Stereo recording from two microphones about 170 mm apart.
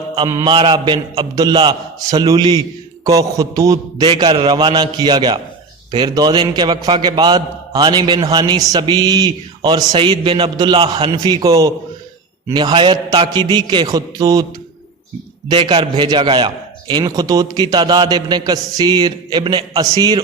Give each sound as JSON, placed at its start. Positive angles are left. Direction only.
{"t": 0.2, "sound": "a man's voice", "side_deg": -20}
{"t": 15.4, "sound": "a man's voice", "side_deg": -25}